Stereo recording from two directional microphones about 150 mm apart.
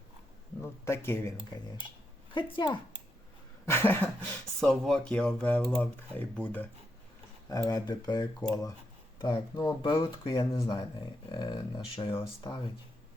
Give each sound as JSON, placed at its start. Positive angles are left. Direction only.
{"t": 0.6, "sound": "speech", "side_deg": 15}
{"t": 2.3, "sound": "speech", "side_deg": 35}
{"t": 3.7, "sound": "speech", "side_deg": 15}
{"t": 4.6, "sound": "speech", "side_deg": 0}
{"t": 7.5, "sound": "speech", "side_deg": 25}